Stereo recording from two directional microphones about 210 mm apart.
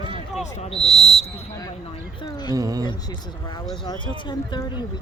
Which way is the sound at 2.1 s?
20° left (ahead or behind).